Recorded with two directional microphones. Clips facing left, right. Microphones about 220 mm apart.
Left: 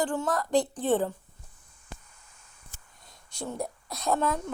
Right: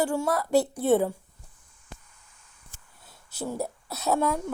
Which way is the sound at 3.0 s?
5° right (ahead or behind).